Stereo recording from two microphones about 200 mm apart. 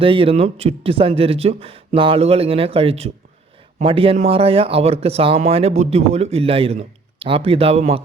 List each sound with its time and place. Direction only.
0.0 s speech: 25° right (ahead or behind)